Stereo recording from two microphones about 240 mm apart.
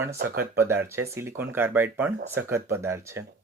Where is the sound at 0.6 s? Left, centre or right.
Centre.